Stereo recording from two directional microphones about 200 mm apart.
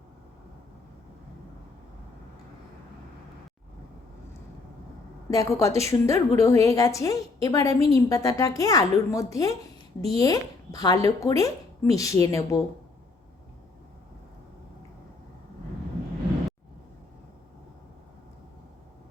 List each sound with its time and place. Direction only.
5.3 s speech: 15° left (ahead or behind)